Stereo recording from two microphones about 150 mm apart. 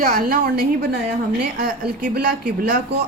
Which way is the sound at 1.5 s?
65° right (ahead or behind).